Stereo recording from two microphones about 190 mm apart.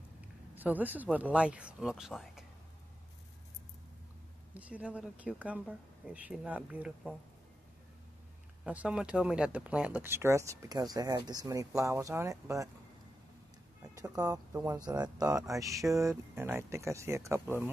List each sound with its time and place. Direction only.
0.6 s speech: 10° right (ahead or behind)
4.6 s speech: 5° right (ahead or behind)
8.6 s speech: 5° right (ahead or behind)
13.8 s speech: 15° right (ahead or behind)